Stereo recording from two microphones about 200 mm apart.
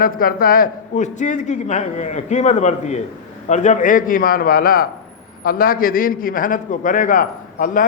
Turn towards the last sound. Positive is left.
turn(degrees=40)  # may be behind; listen again after turning